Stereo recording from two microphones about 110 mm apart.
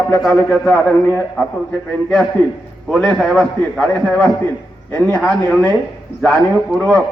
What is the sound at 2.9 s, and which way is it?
A man's voice, 5° left (ahead or behind).